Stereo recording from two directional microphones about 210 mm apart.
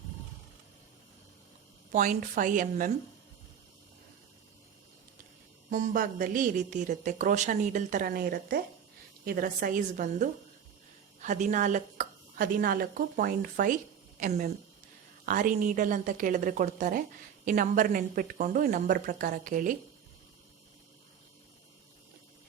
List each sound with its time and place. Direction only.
1.9 s speech: 40° right (ahead or behind)
5.7 s speech: 40° right (ahead or behind)